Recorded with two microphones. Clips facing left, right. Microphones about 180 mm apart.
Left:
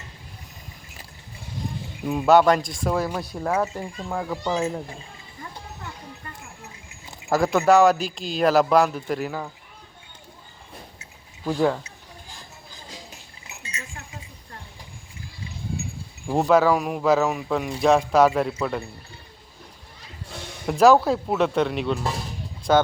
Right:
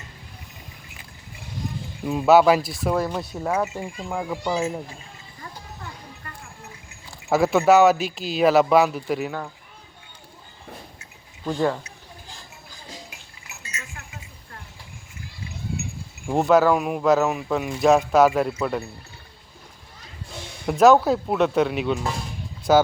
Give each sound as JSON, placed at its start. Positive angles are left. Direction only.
{"t": 2.0, "sound": "speech", "side_deg": 0}
{"t": 7.3, "sound": "speech", "side_deg": 0}
{"t": 11.4, "sound": "speech", "side_deg": 5}
{"t": 13.6, "sound": "chink", "side_deg": 30}
{"t": 16.2, "sound": "speech", "side_deg": 0}
{"t": 20.7, "sound": "speech", "side_deg": 0}